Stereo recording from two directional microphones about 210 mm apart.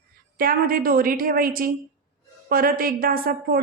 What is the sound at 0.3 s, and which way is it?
A woman's voice, 45° right (ahead or behind).